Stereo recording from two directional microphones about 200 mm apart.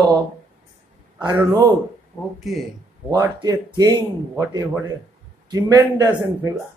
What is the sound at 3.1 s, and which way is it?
A man's voice, 20° right (ahead or behind).